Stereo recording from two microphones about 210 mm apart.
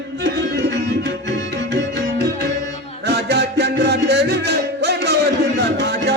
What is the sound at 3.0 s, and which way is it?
Music, 50° right (ahead or behind).